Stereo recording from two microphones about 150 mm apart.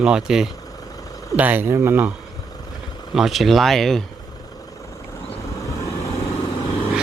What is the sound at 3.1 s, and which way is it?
Speech, centre (ahead or behind).